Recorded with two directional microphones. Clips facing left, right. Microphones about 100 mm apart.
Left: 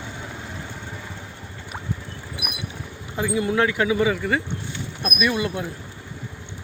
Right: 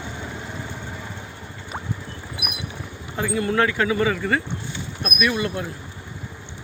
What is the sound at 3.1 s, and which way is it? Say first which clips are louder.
Speech: even; 15° left (ahead or behind).